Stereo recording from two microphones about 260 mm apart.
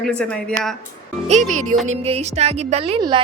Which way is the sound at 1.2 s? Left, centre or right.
Right.